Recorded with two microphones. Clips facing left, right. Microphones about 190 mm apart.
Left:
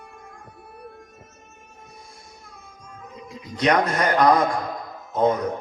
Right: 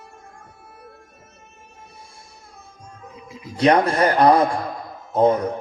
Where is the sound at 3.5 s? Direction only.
30° right (ahead or behind).